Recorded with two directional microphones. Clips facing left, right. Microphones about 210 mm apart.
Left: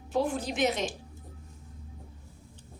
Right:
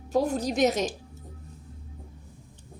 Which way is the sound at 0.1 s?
40° right (ahead or behind).